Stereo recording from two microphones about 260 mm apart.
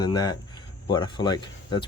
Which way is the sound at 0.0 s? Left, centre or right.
Centre.